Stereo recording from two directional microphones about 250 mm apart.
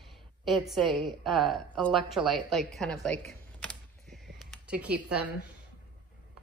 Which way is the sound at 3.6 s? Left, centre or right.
Centre.